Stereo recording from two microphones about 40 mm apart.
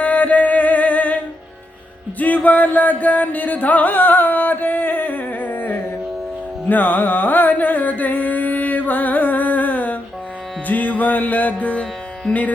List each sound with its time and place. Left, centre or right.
0.0 s music: left
6.7 s carnatic music: left
10.7 s music: left
12.3 s speech: left